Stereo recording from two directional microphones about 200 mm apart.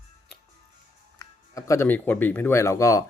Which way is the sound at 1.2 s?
15° left (ahead or behind).